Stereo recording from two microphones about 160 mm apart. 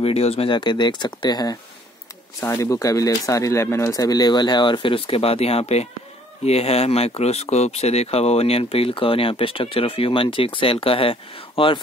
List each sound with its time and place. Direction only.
0.0 s speech: 40° left (ahead or behind)